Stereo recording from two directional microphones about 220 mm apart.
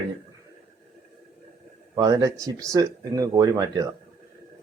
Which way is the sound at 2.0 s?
15° right (ahead or behind).